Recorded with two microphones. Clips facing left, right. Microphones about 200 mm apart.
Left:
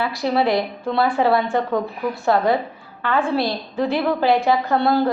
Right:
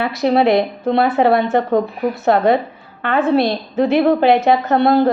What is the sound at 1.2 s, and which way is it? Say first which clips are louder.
Speech: right 4 dB; 65° right (ahead or behind).